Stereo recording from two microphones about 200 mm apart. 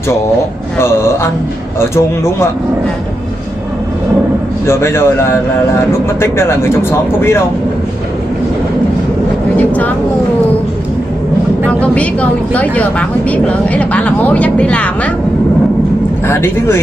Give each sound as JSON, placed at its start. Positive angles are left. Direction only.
{"t": 0.7, "sound": "speech", "side_deg": 15}
{"t": 4.6, "sound": "speech", "side_deg": 15}
{"t": 9.6, "sound": "vehicle", "side_deg": 10}
{"t": 11.8, "sound": "speech", "side_deg": 5}
{"t": 16.3, "sound": "speech", "side_deg": 10}